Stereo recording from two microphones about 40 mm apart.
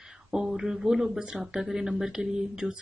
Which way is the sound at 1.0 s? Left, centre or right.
Right.